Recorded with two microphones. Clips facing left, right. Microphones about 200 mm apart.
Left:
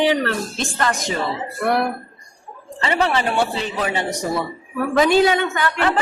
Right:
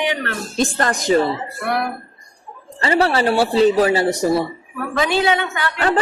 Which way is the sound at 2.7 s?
35° right (ahead or behind).